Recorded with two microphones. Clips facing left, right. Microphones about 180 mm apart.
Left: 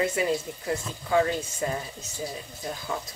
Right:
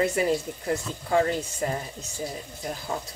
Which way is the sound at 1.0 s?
40° right (ahead or behind).